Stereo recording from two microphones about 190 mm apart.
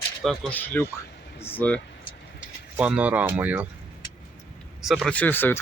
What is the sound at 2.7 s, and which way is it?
Speech, 5° right (ahead or behind).